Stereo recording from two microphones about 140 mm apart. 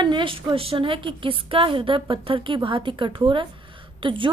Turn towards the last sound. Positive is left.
turn(degrees=-35)  # may be behind; listen again after turning